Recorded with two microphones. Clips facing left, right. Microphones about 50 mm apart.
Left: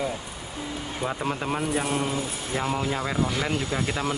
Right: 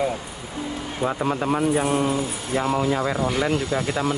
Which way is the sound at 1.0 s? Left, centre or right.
Centre.